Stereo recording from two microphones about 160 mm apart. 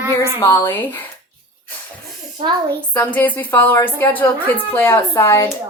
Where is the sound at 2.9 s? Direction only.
10° left (ahead or behind).